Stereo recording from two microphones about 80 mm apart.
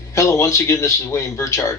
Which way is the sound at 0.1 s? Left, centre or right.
Left.